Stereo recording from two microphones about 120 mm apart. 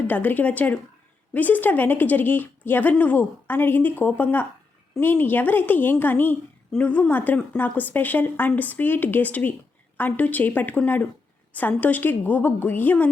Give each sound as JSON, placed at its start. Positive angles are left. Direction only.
{"t": 0.1, "sound": "a woman's voice", "side_deg": 15}